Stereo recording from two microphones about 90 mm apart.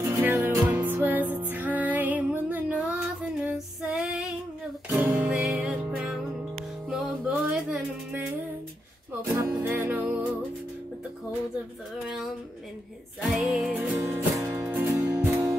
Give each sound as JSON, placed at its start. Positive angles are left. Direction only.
{"t": 0.2, "sound": "music", "side_deg": -20}
{"t": 4.9, "sound": "music", "side_deg": -20}
{"t": 5.4, "sound": "music", "side_deg": -5}
{"t": 9.3, "sound": "music", "side_deg": -25}
{"t": 13.2, "sound": "music", "side_deg": 0}
{"t": 13.7, "sound": "music", "side_deg": -15}
{"t": 14.9, "sound": "music", "side_deg": -35}